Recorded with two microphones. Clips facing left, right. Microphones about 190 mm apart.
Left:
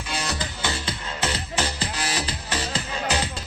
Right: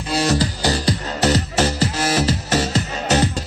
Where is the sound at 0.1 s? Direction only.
35° right (ahead or behind).